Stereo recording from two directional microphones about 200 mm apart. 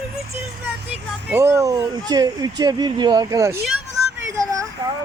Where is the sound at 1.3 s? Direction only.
15° right (ahead or behind).